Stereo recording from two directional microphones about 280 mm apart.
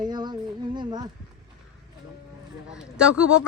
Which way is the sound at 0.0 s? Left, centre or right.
Centre.